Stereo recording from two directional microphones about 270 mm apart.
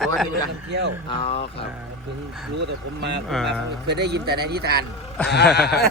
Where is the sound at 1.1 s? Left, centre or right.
Left.